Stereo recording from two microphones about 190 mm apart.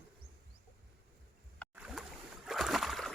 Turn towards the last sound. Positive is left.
turn(degrees=0)  # may be behind; listen again after turning